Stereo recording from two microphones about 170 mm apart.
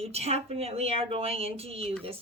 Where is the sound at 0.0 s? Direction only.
40° right (ahead or behind).